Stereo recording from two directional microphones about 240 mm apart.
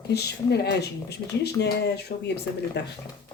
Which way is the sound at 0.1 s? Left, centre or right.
Left.